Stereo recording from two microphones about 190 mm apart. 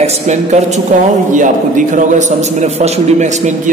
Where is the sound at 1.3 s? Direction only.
40° right (ahead or behind).